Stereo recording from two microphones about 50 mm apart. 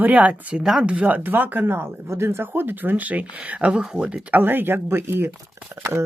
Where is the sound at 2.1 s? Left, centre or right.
Right.